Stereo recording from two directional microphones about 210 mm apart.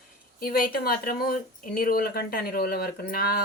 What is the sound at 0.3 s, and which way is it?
Speech, 45° left (ahead or behind).